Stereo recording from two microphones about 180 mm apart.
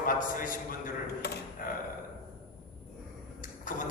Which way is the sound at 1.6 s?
50° left (ahead or behind).